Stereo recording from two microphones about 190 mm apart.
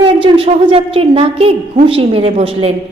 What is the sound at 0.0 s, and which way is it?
A woman's voice, 30° right (ahead or behind).